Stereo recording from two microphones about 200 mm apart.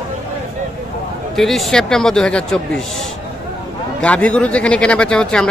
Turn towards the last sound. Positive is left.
turn(degrees=5)  # may be behind; listen again after turning